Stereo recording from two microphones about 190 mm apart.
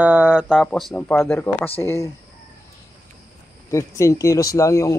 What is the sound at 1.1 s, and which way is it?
Speech, 10° left (ahead or behind).